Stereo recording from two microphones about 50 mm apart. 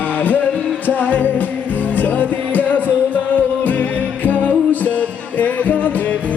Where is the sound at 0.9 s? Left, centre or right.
Left.